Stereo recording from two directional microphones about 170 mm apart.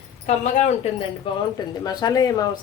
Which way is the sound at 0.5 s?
40° left (ahead or behind).